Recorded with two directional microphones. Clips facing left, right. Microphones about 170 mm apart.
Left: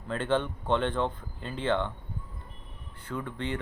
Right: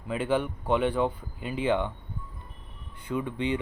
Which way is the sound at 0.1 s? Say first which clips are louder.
Right 1 dB; 10° right (ahead or behind).